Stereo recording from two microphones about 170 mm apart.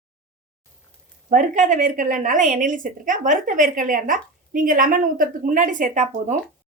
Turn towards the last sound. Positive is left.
turn(degrees=-45)  # may be behind; listen again after turning